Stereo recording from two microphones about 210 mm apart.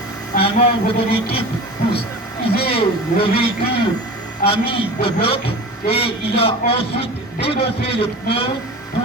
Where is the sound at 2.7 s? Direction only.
25° left (ahead or behind).